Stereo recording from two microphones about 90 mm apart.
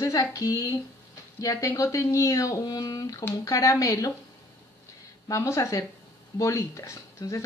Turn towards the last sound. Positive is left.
turn(degrees=35)  # may be behind; listen again after turning